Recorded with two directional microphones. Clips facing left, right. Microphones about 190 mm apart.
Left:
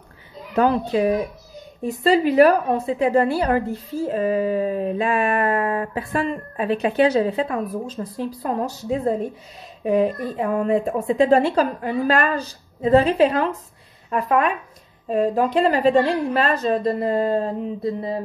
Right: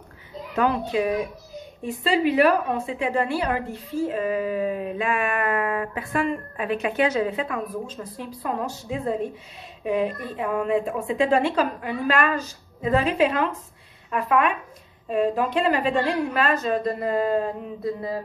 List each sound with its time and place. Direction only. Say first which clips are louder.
0.6 s a woman's voice: left 4 dB; 35° left (ahead or behind)